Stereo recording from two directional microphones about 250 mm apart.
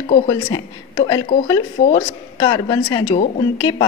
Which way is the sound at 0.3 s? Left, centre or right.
Centre.